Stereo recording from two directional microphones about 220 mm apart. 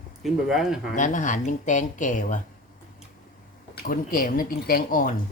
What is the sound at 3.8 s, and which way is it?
Speech, 40° left (ahead or behind).